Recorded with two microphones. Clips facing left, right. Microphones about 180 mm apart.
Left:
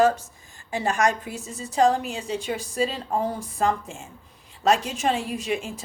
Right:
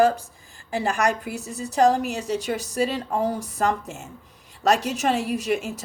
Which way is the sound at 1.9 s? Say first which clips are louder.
Right 3 dB; 40° right (ahead or behind).